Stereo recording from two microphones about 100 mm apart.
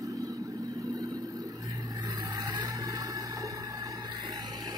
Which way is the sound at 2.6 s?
40° right (ahead or behind).